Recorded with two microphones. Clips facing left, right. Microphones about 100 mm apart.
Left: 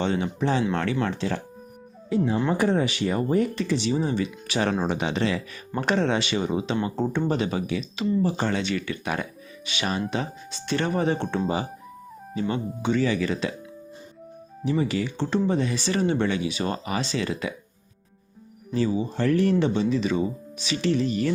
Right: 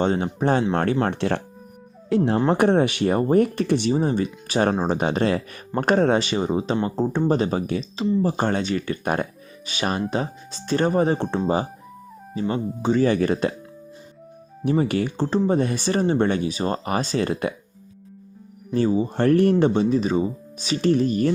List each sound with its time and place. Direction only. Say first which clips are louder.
0.0 s speech: right 4 dB; 45° right (ahead or behind)
2.0 s speech: right 4 dB; 75° right (ahead or behind)
2.5 s speech: right 5 dB; 60° right (ahead or behind); by 8.2 s 25° right (ahead or behind)
8.2 s speech: right 3 dB; 45° right (ahead or behind)
13.1 s speech: right 5 dB; 50° right (ahead or behind)
14.6 s speech: right 4 dB; 50° right (ahead or behind)
18.7 s speech: right 4 dB; 45° right (ahead or behind)